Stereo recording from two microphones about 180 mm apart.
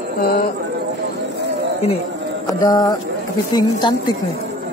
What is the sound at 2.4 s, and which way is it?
A man's voice, 20° left (ahead or behind).